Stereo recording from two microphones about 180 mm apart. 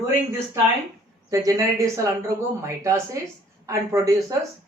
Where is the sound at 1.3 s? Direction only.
20° right (ahead or behind).